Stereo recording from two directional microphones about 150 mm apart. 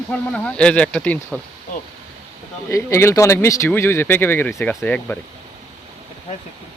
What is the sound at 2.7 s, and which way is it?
Speech, 20° left (ahead or behind).